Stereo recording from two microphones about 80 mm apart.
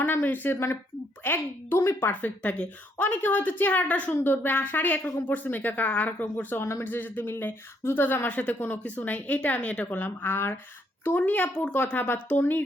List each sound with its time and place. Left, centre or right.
0.0 s a woman's voice: left